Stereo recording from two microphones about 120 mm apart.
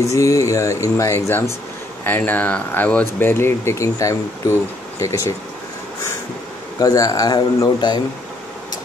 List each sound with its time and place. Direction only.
0.1 s speech: 25° left (ahead or behind)
6.8 s speech: 30° left (ahead or behind)